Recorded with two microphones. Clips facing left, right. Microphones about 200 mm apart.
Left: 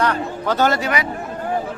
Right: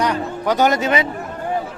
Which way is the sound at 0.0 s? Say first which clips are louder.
Right 1 dB; 15° right (ahead or behind).